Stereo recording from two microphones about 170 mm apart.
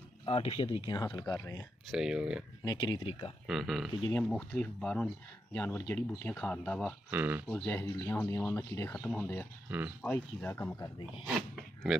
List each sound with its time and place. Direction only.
0.2 s speech: 35° left (ahead or behind); by 1.6 s 20° left (ahead or behind)
1.9 s speech: 5° right (ahead or behind)
2.6 s speech: 25° left (ahead or behind)
3.4 s speech: centre (ahead or behind)
7.1 s speech: 10° right (ahead or behind)
7.4 s speech: 10° left (ahead or behind)
9.7 s speech: 10° right (ahead or behind)
10.0 s speech: 10° left (ahead or behind)
11.2 s speech: 5° right (ahead or behind)